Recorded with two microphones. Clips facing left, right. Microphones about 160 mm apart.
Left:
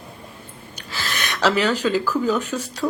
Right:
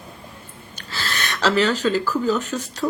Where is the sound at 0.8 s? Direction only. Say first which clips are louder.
Even; 10° left (ahead or behind).